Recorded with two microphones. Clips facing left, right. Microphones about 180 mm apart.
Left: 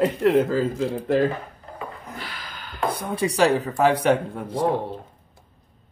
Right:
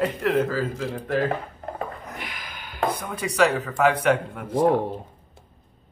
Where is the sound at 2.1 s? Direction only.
15° right (ahead or behind).